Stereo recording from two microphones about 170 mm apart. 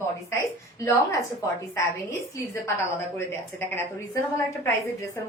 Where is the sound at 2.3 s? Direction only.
15° left (ahead or behind).